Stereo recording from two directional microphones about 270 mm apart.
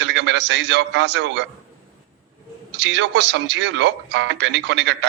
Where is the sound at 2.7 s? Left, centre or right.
Right.